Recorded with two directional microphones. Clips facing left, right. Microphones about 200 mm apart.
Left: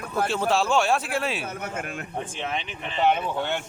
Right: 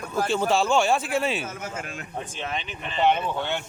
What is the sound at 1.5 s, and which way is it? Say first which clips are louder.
Speech: left 2 dB; 60° left (ahead or behind).